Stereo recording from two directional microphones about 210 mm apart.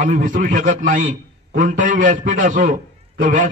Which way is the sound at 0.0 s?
40° right (ahead or behind).